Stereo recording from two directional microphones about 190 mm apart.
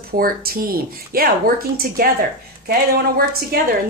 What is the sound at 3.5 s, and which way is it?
Speech, 50° right (ahead or behind).